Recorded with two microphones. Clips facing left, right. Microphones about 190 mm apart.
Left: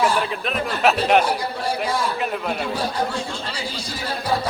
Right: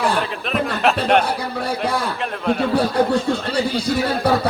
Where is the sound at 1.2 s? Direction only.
60° right (ahead or behind).